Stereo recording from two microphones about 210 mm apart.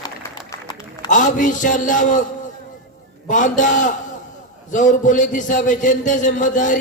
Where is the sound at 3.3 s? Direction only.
35° left (ahead or behind).